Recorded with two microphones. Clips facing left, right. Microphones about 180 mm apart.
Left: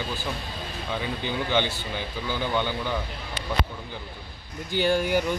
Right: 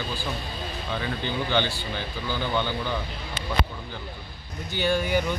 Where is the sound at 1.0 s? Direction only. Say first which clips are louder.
Even; 15° left (ahead or behind).